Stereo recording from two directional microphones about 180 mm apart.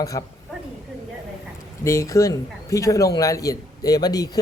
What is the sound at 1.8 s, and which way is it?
A man's voice, 15° left (ahead or behind).